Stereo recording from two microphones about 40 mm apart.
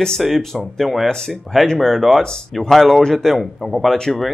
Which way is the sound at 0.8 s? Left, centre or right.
Centre.